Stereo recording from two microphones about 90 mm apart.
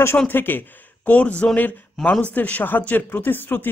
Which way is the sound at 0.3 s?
20° left (ahead or behind).